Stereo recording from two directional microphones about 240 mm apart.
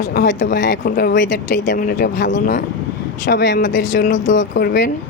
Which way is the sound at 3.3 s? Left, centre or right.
Left.